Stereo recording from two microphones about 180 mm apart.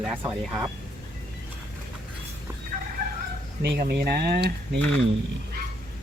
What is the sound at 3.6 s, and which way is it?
Speech, 65° right (ahead or behind).